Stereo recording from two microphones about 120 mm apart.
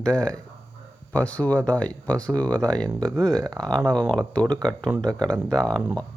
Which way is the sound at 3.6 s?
5° left (ahead or behind).